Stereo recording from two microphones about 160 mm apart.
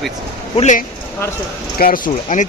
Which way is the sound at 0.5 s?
45° left (ahead or behind).